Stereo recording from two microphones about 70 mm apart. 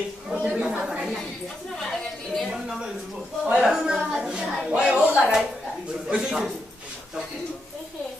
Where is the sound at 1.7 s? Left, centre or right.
Centre.